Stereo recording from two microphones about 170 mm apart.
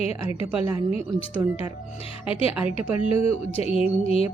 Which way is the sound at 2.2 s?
35° left (ahead or behind).